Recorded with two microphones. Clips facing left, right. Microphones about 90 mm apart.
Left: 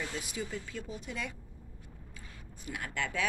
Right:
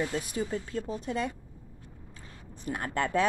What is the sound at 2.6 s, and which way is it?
Speech, 40° right (ahead or behind).